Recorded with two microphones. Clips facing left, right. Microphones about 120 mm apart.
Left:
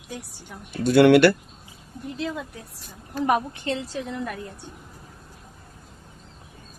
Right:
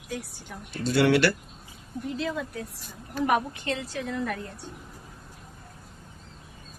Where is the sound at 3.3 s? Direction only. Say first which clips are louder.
Left 3 dB; 30° left (ahead or behind).